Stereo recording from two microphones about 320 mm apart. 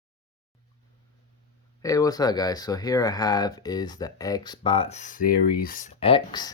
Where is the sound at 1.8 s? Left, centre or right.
Centre.